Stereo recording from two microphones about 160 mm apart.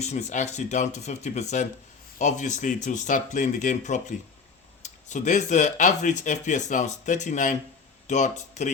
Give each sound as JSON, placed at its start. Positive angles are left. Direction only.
{"t": 0.0, "sound": "speech", "side_deg": 45}